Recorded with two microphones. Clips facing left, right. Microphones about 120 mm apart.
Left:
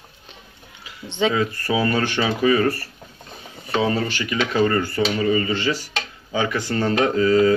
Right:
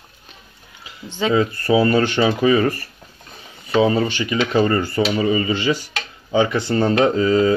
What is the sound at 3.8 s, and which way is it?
Speech, 20° right (ahead or behind).